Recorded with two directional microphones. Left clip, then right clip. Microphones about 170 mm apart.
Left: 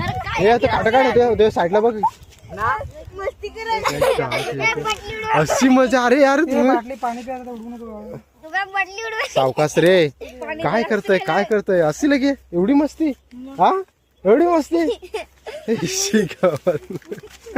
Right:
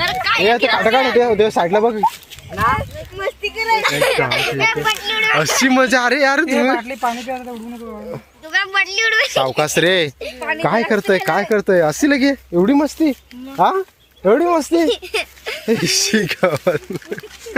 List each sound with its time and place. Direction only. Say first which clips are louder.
0.4 s speech: left 1 dB; 30° right (ahead or behind)
2.6 s speech: right 4 dB; 40° right (ahead or behind)
3.8 s speech: right 3 dB; 5° left (ahead or behind)
8.5 s a woman's voice: right 6 dB; 50° left (ahead or behind)
9.6 s speech: left 1 dB; centre (ahead or behind)
10.6 s speech: right 2 dB; 40° right (ahead or behind)
15.1 s speech: right 7 dB; 25° left (ahead or behind)
15.6 s speech: right 5 dB; 30° right (ahead or behind)
16.0 s speech: right 2 dB; 10° right (ahead or behind)
17.5 s oink: right 4 dB; 55° left (ahead or behind)